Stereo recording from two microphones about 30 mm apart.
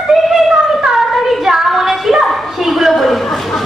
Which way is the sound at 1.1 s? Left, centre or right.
Centre.